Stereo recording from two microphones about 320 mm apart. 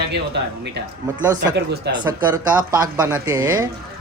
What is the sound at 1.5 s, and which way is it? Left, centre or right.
Speech, right.